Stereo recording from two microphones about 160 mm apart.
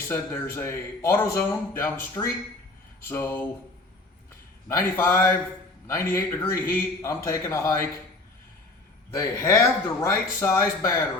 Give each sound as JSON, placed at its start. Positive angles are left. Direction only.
{"t": 0.1, "sound": "speech", "side_deg": 15}
{"t": 4.7, "sound": "speech", "side_deg": 15}
{"t": 9.1, "sound": "speech", "side_deg": 20}